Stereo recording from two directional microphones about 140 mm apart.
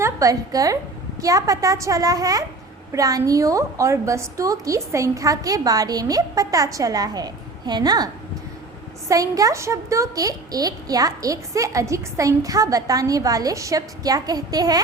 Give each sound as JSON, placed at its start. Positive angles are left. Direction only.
{"t": 0.0, "sound": "a woman's voice", "side_deg": -25}